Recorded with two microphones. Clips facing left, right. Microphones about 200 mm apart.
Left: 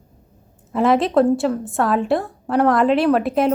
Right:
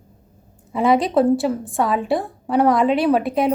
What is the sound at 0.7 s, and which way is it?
A woman's voice, centre (ahead or behind).